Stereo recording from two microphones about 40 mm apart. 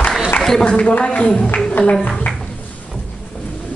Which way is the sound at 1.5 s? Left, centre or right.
Left.